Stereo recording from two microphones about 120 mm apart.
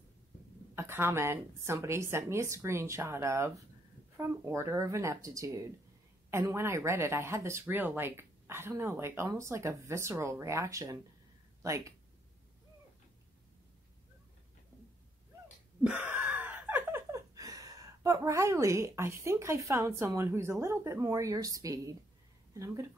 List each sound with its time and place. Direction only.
0.7 s speech: 20° right (ahead or behind)
15.8 s gasp: 10° right (ahead or behind); by 21.9 s 30° right (ahead or behind)
22.5 s speech: 25° right (ahead or behind)